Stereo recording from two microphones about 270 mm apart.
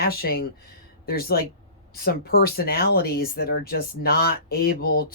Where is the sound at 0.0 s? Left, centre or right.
Left.